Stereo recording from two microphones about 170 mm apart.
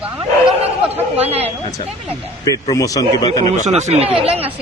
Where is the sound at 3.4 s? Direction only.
40° right (ahead or behind).